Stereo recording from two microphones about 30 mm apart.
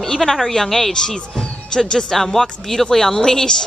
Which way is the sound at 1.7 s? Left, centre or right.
Left.